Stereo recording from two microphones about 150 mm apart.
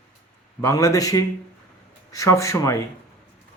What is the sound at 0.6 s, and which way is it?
Speech, 20° left (ahead or behind).